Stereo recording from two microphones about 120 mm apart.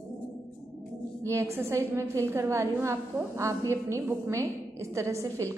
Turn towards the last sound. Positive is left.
turn(degrees=-25)  # may be behind; listen again after turning